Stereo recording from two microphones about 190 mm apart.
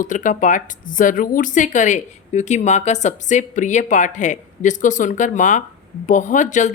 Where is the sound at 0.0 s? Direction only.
45° left (ahead or behind).